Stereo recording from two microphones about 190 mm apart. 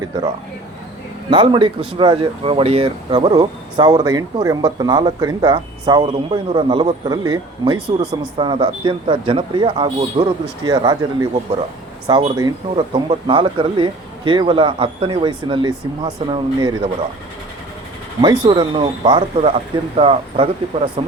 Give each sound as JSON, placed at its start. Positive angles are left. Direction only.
{"t": 1.3, "sound": "speech", "side_deg": -25}
{"t": 18.2, "sound": "speech", "side_deg": -25}